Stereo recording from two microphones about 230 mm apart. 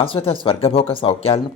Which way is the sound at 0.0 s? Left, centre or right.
Left.